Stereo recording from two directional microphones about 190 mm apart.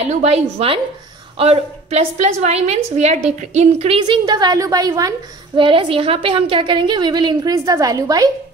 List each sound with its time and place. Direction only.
0.0 s a woman's voice: 35° right (ahead or behind); by 8.3 s 20° right (ahead or behind)